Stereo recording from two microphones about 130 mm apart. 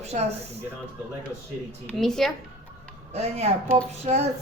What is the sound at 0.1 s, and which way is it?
Speech, 70° right (ahead or behind).